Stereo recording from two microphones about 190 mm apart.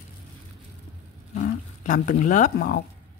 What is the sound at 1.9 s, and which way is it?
Speech, 45° left (ahead or behind).